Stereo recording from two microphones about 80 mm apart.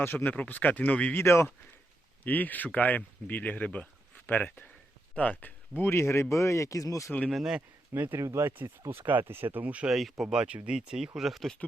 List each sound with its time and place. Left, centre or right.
0.0 s speech: left
1.2 s speech: left
2.2 s speech: left
7.3 s speech: centre
7.9 s speech: right
8.2 s speech: right; by 9.9 s centre
9.9 s speech: centre